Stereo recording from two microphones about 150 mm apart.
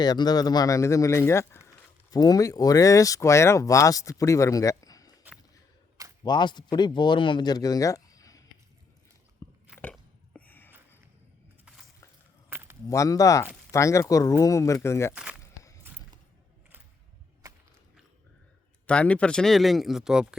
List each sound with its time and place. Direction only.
0.0 s speech: 25° left (ahead or behind)
6.2 s speech: 30° left (ahead or behind)
9.4 s biting: 20° left (ahead or behind)
9.9 s a sound: 10° left (ahead or behind)
12.5 s keys jangling: 15° right (ahead or behind)
12.9 s speech: 20° left (ahead or behind)
15.1 s speech: 10° right (ahead or behind)
18.9 s speech: 10° left (ahead or behind)